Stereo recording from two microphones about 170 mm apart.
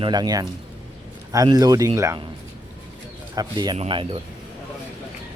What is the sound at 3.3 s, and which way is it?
Speech, 25° right (ahead or behind).